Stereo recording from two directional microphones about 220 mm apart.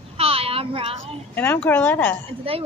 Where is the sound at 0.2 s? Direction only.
25° right (ahead or behind).